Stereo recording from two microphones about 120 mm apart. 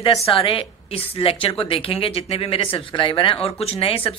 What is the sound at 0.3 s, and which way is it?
A woman's voice, 50° left (ahead or behind).